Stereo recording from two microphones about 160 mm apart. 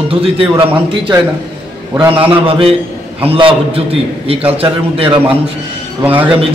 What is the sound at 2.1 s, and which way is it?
A man's voice, 35° right (ahead or behind).